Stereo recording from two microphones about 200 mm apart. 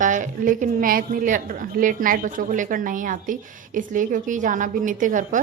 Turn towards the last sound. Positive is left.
turn(degrees=-40)  # may be behind; listen again after turning